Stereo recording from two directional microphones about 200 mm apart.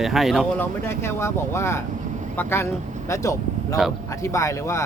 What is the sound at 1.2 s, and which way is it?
Speech, 15° left (ahead or behind).